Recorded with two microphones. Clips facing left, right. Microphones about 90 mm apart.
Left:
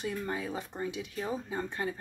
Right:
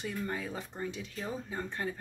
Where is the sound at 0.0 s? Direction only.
15° left (ahead or behind).